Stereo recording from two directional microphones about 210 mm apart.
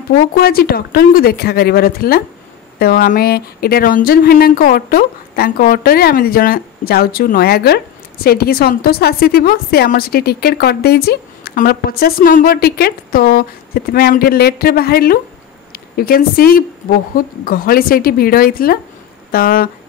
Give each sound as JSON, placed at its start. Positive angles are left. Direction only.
{"t": 0.4, "sound": "speech", "side_deg": 45}